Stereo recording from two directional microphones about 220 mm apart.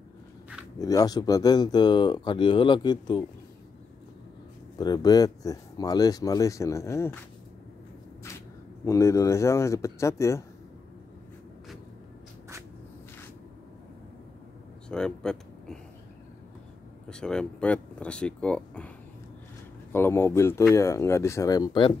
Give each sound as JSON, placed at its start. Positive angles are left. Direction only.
{"t": 0.7, "sound": "speech", "side_deg": 15}
{"t": 4.7, "sound": "speech", "side_deg": 20}
{"t": 8.8, "sound": "speech", "side_deg": 15}
{"t": 14.9, "sound": "a sound", "side_deg": 5}
{"t": 17.1, "sound": "speech", "side_deg": 5}
{"t": 19.9, "sound": "speech", "side_deg": 10}